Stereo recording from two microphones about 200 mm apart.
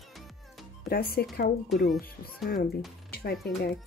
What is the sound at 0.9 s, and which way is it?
Speech, 50° left (ahead or behind).